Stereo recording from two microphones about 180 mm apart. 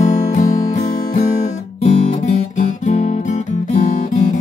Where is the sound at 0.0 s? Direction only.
40° left (ahead or behind).